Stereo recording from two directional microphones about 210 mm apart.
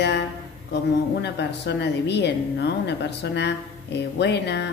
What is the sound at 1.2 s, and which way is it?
A woman's voice, 55° left (ahead or behind).